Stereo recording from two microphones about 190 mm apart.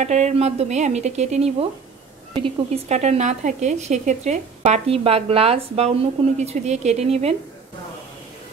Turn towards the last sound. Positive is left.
turn(degrees=-35)  # may be behind; listen again after turning